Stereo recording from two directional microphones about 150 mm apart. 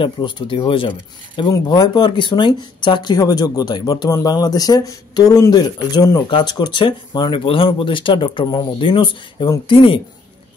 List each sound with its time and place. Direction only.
0.0 s speech: 30° left (ahead or behind)